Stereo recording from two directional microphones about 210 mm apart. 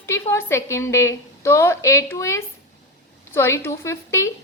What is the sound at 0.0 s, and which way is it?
A woman's voice, 15° left (ahead or behind).